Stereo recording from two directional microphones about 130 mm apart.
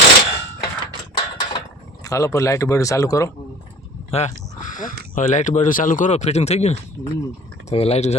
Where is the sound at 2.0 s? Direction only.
25° left (ahead or behind).